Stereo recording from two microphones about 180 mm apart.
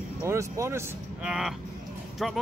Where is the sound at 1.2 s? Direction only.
5° right (ahead or behind).